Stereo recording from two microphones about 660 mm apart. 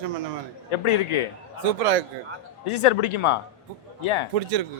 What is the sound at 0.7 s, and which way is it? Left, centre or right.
Speech, left.